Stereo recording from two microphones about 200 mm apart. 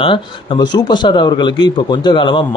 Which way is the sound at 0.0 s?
25° left (ahead or behind).